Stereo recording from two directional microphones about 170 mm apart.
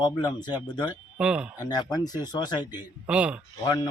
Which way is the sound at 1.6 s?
25° left (ahead or behind).